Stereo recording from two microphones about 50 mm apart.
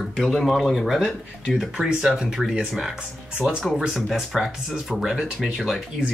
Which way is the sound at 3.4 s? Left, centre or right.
Centre.